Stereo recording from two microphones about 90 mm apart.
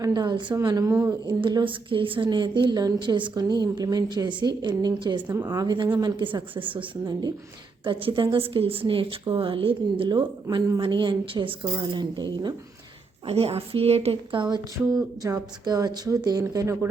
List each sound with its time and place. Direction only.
0.1 s a woman's voice: 55° right (ahead or behind)
0.9 s speech: 30° right (ahead or behind)
1.4 s a woman's voice: 65° right (ahead or behind)
2.3 s a woman's voice: 55° right (ahead or behind)
5.3 s speech: 30° right (ahead or behind)
5.6 s a woman's voice: 55° right (ahead or behind)
6.2 s a woman's voice: 70° right (ahead or behind)
8.0 s a woman's voice: 70° right (ahead or behind)
10.8 s a woman's voice: 65° right (ahead or behind)
13.2 s a woman's voice: 90° right; by 14.6 s 60° right (ahead or behind)
14.9 s a woman's voice: 40° right (ahead or behind)